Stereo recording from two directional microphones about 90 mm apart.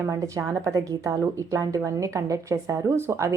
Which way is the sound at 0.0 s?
35° right (ahead or behind).